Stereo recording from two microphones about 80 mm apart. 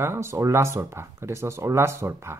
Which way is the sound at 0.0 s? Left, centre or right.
Right.